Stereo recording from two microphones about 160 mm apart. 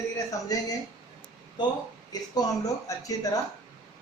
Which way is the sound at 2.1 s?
25° left (ahead or behind).